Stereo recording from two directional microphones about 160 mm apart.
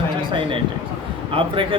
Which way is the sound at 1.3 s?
35° right (ahead or behind).